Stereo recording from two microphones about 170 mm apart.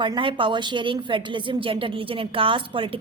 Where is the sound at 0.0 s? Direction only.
30° right (ahead or behind).